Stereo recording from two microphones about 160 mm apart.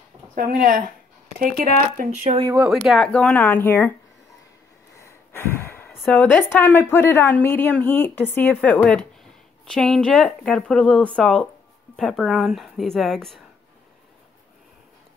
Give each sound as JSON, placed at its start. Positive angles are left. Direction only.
{"t": 0.3, "sound": "speech", "side_deg": -65}
{"t": 2.7, "sound": "a woman's voice", "side_deg": 0}
{"t": 4.9, "sound": "snort", "side_deg": 15}
{"t": 5.9, "sound": "a woman's voice", "side_deg": 5}